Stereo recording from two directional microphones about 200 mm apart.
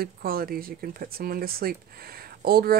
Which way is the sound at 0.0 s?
50° right (ahead or behind).